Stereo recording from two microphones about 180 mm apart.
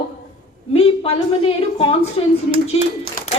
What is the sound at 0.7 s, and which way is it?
A woman's voice, 35° left (ahead or behind).